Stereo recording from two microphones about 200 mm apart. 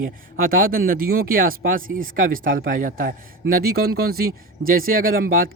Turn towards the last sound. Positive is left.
turn(degrees=-45)  # may be behind; listen again after turning